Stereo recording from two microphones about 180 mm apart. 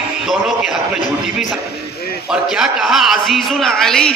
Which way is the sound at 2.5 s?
Centre (ahead or behind).